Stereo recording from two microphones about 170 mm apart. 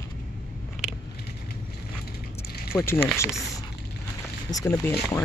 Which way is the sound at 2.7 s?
15° left (ahead or behind).